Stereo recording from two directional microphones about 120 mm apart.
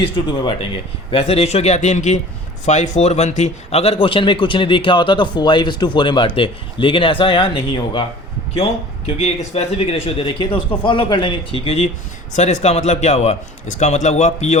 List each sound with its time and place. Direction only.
1.1 s a man's voice: 55° left (ahead or behind)
9.0 s a man's voice: 60° left (ahead or behind)
12.4 s speech: 70° left (ahead or behind)